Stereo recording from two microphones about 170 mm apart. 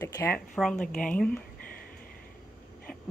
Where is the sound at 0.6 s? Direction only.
5° left (ahead or behind).